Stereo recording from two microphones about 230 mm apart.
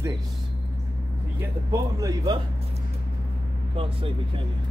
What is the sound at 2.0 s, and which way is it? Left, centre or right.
Speech, centre.